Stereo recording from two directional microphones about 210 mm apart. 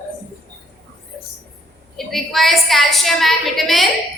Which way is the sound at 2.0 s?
Centre (ahead or behind).